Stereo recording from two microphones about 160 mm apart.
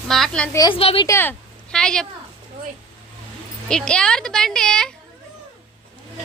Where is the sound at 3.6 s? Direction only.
5° left (ahead or behind).